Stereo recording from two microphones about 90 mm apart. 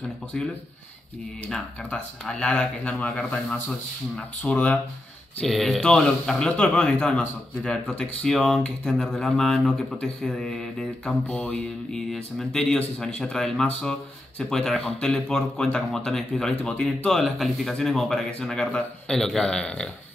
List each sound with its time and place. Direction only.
1.5 s speech: 10° left (ahead or behind)
5.4 s speech: 5° left (ahead or behind)
11.2 s speech: 15° left (ahead or behind)
11.9 s speech: 5° left (ahead or behind)